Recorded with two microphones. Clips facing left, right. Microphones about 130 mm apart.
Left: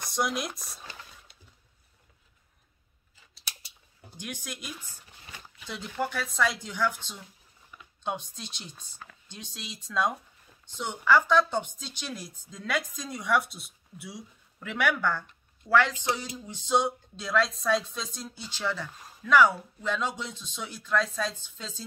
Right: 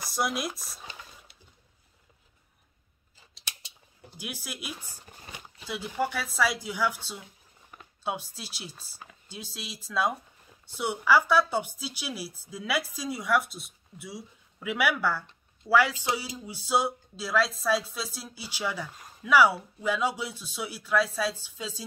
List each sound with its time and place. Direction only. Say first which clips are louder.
0.0 s speech: even; centre (ahead or behind)
4.2 s speech: even; 5° right (ahead or behind)
4.9 s a sound: right 4 dB; 40° right (ahead or behind)
5.7 s speech: right 2 dB; 5° right (ahead or behind)